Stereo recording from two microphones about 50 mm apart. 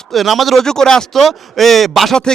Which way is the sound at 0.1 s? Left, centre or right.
Centre.